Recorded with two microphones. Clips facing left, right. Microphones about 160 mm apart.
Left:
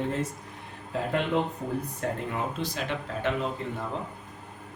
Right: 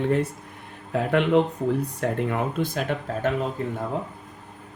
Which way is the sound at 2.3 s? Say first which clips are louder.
Right 6 dB; 55° right (ahead or behind).